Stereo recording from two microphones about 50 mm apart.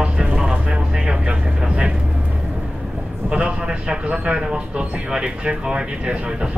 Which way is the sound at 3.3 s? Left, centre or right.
Right.